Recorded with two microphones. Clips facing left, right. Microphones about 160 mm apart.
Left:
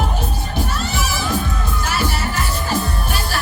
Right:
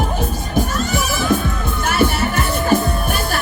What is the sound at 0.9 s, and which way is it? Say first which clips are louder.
Music: right 4 dB; 50° right (ahead or behind).